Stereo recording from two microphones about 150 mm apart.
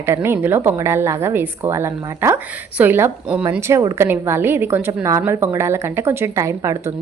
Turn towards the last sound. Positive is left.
turn(degrees=-20)  # may be behind; listen again after turning